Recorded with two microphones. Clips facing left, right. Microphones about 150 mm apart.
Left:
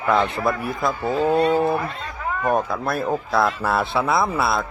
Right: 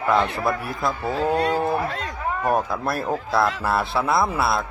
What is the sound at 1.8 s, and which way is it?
Speech, 90° right.